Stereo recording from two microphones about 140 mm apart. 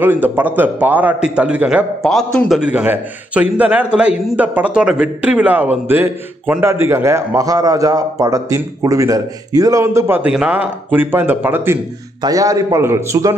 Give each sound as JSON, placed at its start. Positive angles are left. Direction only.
{"t": 0.0, "sound": "a man's voice", "side_deg": -15}